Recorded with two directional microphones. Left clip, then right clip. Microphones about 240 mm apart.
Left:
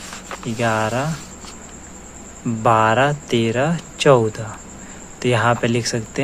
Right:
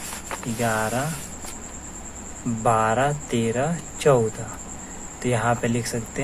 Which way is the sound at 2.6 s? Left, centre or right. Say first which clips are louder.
Left 5 dB; left.